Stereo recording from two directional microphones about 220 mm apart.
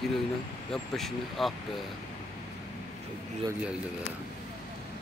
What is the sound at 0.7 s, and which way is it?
Speech, centre (ahead or behind).